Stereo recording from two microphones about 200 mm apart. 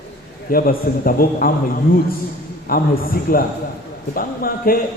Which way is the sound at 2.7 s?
45° left (ahead or behind).